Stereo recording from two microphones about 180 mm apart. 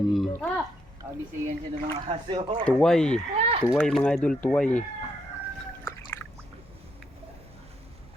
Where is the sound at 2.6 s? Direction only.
5° left (ahead or behind).